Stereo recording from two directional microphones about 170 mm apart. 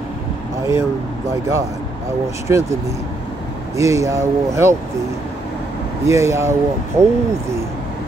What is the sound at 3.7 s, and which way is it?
Speech, 20° right (ahead or behind).